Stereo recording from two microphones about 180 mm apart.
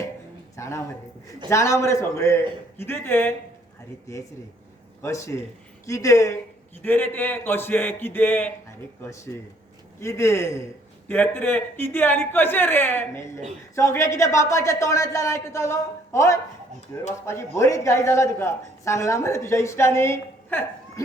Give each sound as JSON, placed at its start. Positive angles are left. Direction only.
{"t": 0.5, "sound": "a sound", "side_deg": 15}
{"t": 1.5, "sound": "a woman's voice", "side_deg": 15}
{"t": 5.0, "sound": "a woman's voice", "side_deg": 15}